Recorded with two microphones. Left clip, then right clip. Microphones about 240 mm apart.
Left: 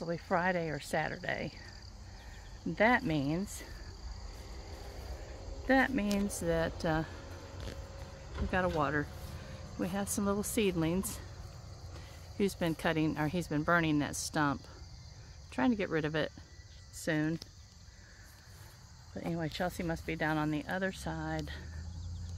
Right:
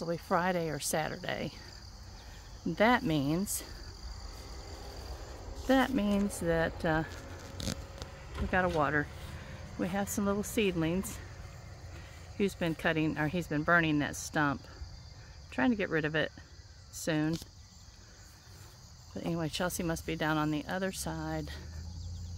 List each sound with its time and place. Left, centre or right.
0.0 s speech: centre
2.7 s speech: right
4.4 s a sound: right
5.7 s speech: centre
8.1 s a sound: right
8.5 s speech: centre
12.4 s speech: centre
19.1 s speech: centre